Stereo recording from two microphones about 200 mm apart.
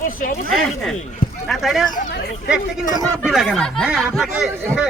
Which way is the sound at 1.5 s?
Centre (ahead or behind).